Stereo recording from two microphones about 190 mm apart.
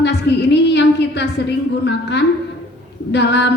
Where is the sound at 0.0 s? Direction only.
60° left (ahead or behind).